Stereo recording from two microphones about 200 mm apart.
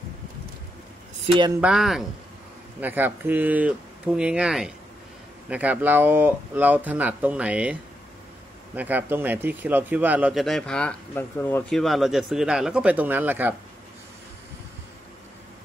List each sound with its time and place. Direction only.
1.2 s speech: 25° right (ahead or behind)
1.6 s a man's voice: 5° right (ahead or behind)
8.7 s a man's voice: 10° right (ahead or behind)